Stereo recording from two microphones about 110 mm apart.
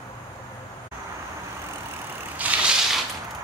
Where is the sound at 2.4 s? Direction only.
10° right (ahead or behind).